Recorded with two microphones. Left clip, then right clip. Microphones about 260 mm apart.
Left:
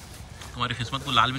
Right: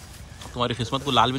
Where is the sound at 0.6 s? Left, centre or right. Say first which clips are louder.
Right 3 dB; centre.